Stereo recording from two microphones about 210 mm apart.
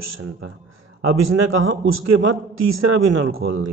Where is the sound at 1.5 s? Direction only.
70° right (ahead or behind).